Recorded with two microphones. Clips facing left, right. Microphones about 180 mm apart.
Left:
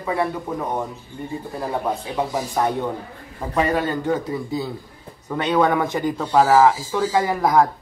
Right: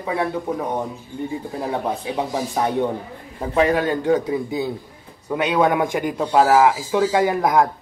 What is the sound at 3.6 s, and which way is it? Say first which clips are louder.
Speech: right 3 dB; 10° right (ahead or behind).